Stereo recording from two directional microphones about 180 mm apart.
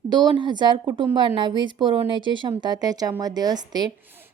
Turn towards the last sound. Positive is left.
turn(degrees=-20)  # may be behind; listen again after turning